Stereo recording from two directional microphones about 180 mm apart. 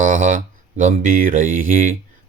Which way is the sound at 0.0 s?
45° right (ahead or behind).